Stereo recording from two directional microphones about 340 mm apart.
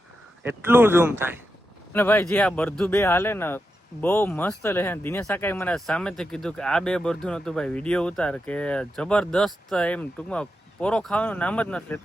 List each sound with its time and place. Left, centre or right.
0.4 s speech: centre
1.9 s speech: centre